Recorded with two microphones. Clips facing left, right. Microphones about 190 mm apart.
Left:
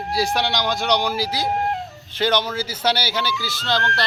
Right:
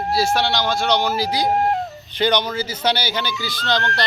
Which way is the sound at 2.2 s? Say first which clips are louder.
Right 1 dB; 5° left (ahead or behind).